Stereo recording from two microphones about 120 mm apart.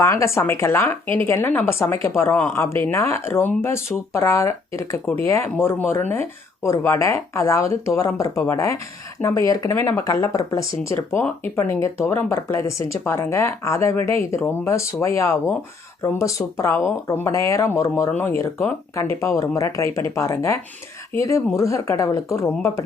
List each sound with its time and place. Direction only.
0.0 s speech: 25° left (ahead or behind)